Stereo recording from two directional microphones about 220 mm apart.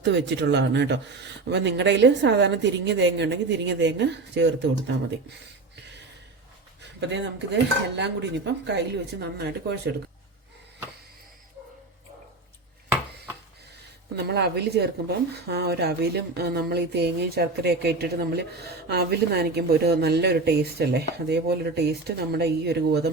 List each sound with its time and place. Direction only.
0.0 s speech: 50° right (ahead or behind)
7.1 s speech: 55° right (ahead or behind)
14.3 s speech: 50° right (ahead or behind)